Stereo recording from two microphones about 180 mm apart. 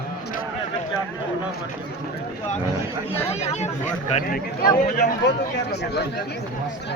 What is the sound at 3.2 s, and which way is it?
Speech, 35° left (ahead or behind).